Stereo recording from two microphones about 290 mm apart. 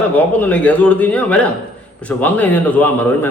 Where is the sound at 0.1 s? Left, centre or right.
Centre.